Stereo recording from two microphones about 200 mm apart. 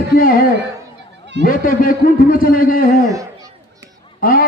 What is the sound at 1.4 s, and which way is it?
A man's voice, 45° left (ahead or behind).